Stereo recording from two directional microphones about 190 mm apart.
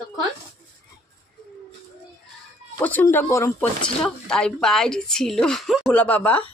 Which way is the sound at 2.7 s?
10° left (ahead or behind).